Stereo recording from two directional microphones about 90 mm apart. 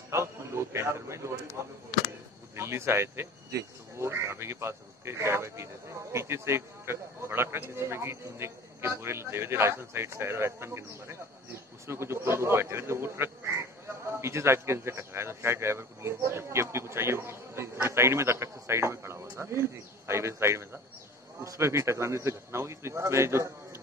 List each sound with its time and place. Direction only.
0.1 s a man's voice: 30° right (ahead or behind)
2.5 s speech: 30° right (ahead or behind)